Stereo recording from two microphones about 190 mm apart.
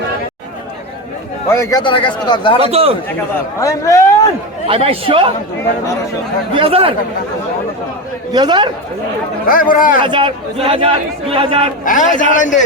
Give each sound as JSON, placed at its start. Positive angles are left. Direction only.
{"t": 1.5, "sound": "a man's voice", "side_deg": 15}
{"t": 2.6, "sound": "a man's voice", "side_deg": -30}
{"t": 3.6, "sound": "speech", "side_deg": 15}
{"t": 4.7, "sound": "speech", "side_deg": -30}
{"t": 6.5, "sound": "speech", "side_deg": -30}
{"t": 8.3, "sound": "speech", "side_deg": -20}
{"t": 9.5, "sound": "speech", "side_deg": 45}
{"t": 10.0, "sound": "speech", "side_deg": -25}
{"t": 11.9, "sound": "speech", "side_deg": 40}